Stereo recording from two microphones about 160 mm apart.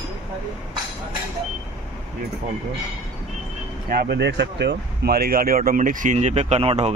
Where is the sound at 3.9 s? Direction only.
75° right (ahead or behind).